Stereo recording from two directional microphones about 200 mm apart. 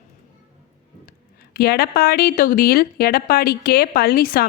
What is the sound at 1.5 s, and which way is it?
A woman's voice, 50° left (ahead or behind).